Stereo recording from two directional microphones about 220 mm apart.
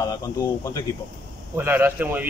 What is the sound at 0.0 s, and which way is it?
Speech, 15° left (ahead or behind).